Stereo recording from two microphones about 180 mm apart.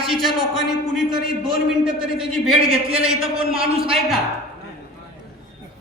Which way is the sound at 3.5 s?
30° right (ahead or behind).